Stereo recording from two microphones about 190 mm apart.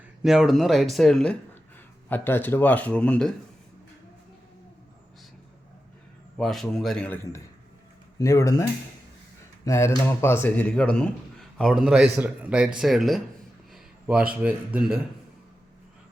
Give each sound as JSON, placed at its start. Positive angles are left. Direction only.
{"t": 0.2, "sound": "a man's voice", "side_deg": 0}
{"t": 6.3, "sound": "a man's voice", "side_deg": 0}
{"t": 9.6, "sound": "a man's voice", "side_deg": 15}